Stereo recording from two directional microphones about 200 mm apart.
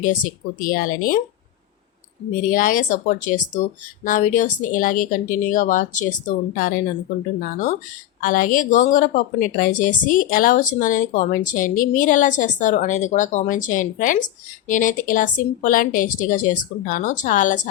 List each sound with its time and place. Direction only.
0.0 s speech: 45° left (ahead or behind)
2.4 s a woman's voice: 45° left (ahead or behind)
8.2 s a woman's voice: 45° left (ahead or behind)